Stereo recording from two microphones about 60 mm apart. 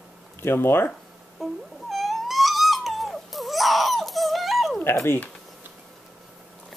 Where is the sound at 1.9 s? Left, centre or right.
Centre.